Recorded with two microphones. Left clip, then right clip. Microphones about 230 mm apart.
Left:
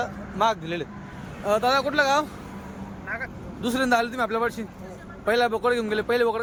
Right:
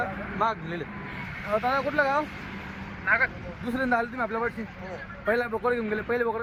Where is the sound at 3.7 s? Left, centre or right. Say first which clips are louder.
Left 4 dB; left.